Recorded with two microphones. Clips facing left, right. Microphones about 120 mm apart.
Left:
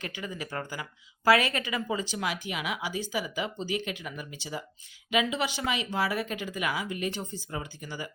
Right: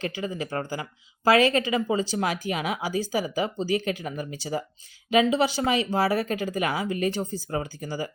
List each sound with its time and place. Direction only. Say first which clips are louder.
0.0 s speech: right 7 dB; 30° right (ahead or behind)